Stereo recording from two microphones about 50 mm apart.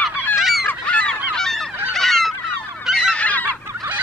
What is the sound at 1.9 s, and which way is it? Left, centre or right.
Fowl, centre.